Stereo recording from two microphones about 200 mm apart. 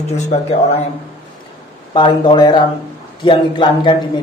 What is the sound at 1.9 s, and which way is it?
A man's voice, 25° left (ahead or behind).